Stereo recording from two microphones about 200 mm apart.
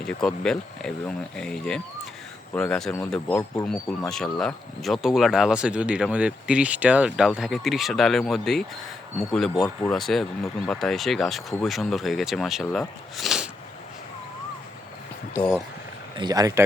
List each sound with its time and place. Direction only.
0.0 s speech: 5° left (ahead or behind)
15.4 s speech: 5° left (ahead or behind)
16.1 s speech: 20° right (ahead or behind)